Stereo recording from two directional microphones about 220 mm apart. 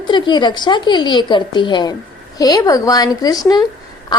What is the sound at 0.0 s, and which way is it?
A woman's voice, 20° left (ahead or behind).